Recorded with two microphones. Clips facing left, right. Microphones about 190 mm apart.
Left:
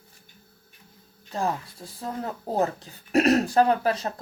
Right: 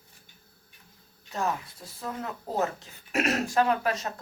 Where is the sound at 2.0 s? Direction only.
35° left (ahead or behind).